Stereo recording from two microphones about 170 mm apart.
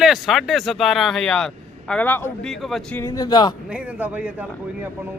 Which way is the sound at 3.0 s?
20° left (ahead or behind).